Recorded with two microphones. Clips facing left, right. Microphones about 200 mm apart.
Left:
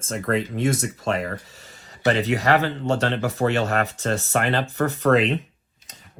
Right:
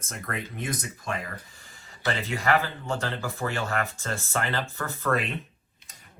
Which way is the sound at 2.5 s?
70° left (ahead or behind).